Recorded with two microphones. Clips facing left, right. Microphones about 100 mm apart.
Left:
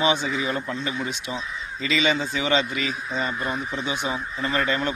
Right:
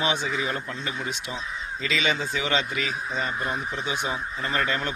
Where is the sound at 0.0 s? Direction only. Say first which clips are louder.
Left 3 dB; 5° left (ahead or behind).